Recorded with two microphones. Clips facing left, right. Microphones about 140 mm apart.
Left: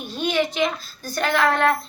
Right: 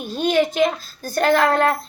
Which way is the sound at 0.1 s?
45° right (ahead or behind).